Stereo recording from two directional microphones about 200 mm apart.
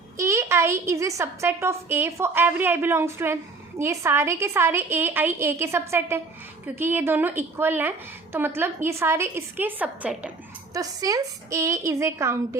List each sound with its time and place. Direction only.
0.2 s a woman's voice: 15° right (ahead or behind)
10.8 s a woman's voice: 15° right (ahead or behind)